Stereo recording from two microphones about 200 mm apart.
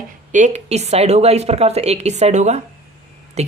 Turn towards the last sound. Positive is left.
turn(degrees=-35)  # may be behind; listen again after turning